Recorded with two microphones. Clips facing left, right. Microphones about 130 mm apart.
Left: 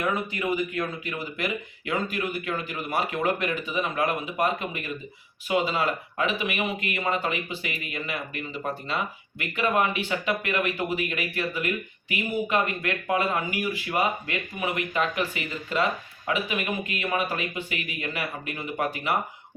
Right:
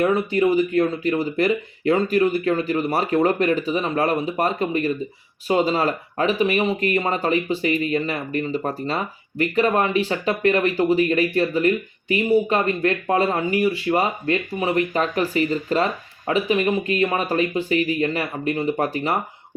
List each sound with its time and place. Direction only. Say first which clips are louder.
0.0 s speech: right 9 dB; 30° right (ahead or behind)